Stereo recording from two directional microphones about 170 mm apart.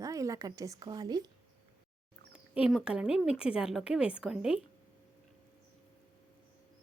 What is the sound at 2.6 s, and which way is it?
A woman's voice, 5° right (ahead or behind).